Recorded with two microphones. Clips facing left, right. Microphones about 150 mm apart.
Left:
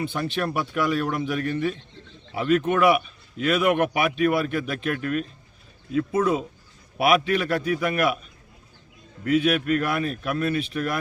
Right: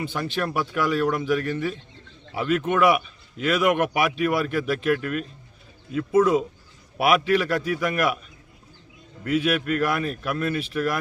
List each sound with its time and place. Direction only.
0.1 s a man's voice: centre (ahead or behind)
7.0 s a man's voice: centre (ahead or behind)
9.2 s a man's voice: centre (ahead or behind)